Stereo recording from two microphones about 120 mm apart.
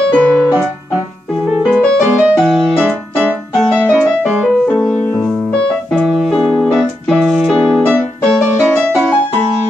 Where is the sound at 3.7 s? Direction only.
10° left (ahead or behind).